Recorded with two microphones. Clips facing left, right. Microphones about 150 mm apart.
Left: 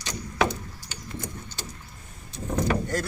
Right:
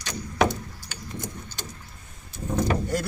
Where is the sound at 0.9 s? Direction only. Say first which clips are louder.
Even; 10° right (ahead or behind).